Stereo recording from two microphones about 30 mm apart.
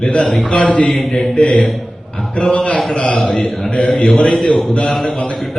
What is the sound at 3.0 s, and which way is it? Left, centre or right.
Speech, left.